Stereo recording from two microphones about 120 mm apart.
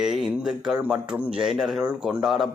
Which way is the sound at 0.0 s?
5° right (ahead or behind).